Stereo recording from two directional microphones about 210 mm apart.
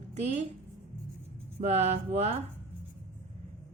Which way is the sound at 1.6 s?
30° right (ahead or behind).